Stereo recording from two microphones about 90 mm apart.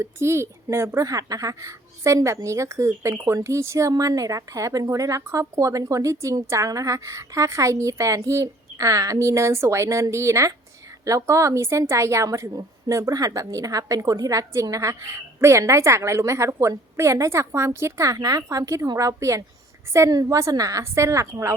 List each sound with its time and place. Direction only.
0.0 s a woman's voice: 30° right (ahead or behind)